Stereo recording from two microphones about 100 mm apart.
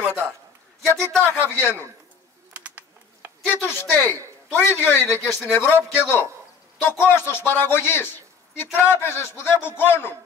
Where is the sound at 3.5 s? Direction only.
20° left (ahead or behind).